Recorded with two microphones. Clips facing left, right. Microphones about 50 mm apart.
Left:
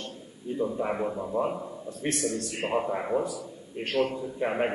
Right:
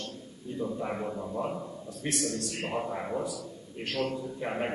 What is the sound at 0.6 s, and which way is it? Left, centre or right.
A man's voice, centre.